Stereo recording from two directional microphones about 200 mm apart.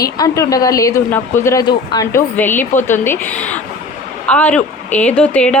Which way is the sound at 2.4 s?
10° left (ahead or behind).